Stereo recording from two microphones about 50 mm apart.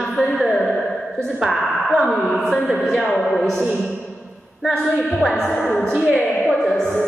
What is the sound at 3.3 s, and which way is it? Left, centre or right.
Music, centre.